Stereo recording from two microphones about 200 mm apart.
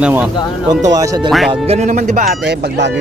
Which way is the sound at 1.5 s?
35° right (ahead or behind).